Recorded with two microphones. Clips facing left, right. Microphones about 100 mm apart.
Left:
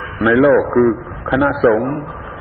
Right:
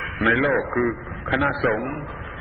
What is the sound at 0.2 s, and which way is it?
Speech, 40° left (ahead or behind).